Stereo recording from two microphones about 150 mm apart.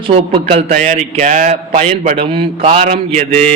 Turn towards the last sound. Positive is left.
turn(degrees=-60)  # may be behind; listen again after turning